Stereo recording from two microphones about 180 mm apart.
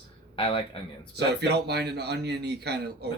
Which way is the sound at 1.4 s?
70° right (ahead or behind).